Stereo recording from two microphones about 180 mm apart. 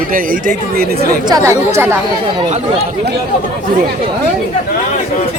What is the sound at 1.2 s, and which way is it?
Speech, 20° right (ahead or behind).